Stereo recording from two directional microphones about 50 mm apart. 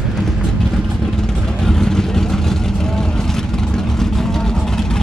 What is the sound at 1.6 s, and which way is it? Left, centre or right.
Vehicle, centre.